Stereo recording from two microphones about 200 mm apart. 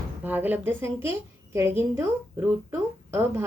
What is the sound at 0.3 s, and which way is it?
A woman's voice, 10° right (ahead or behind).